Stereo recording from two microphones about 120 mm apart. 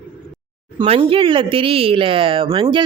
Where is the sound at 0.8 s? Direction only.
50° right (ahead or behind).